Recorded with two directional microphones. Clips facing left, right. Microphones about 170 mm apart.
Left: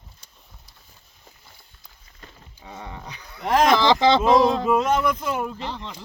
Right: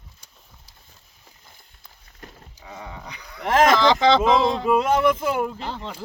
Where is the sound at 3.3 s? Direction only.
Centre (ahead or behind).